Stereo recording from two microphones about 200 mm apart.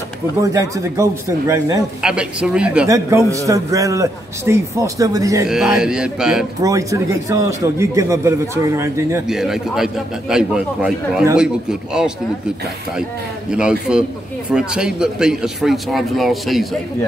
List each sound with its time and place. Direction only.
0.4 s a man's voice: 15° right (ahead or behind)
2.0 s a man's voice: 5° right (ahead or behind)
5.5 s speech: 5° right (ahead or behind)
6.6 s a man's voice: 15° right (ahead or behind)
9.3 s speech: centre (ahead or behind)
13.5 s speech: 5° right (ahead or behind)